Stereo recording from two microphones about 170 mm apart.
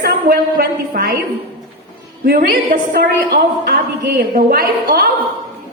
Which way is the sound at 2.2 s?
60° right (ahead or behind).